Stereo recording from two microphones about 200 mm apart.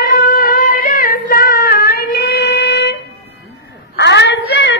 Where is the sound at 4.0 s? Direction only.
60° left (ahead or behind).